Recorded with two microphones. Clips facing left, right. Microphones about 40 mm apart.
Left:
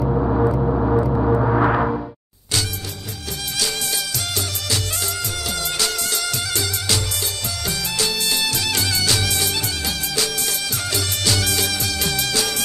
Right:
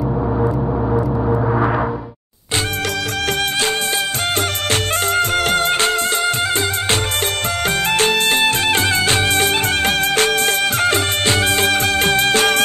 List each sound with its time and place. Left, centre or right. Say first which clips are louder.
3.5 s music: right 6 dB; right